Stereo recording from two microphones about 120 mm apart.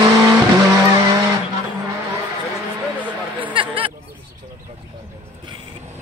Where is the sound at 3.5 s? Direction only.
45° right (ahead or behind).